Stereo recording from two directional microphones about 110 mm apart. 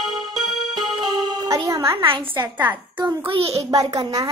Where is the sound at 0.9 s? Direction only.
35° right (ahead or behind).